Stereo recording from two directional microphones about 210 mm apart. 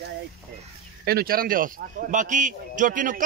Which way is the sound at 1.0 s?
45° right (ahead or behind).